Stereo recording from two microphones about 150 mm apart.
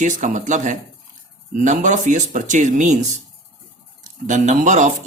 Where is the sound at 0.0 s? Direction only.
55° right (ahead or behind).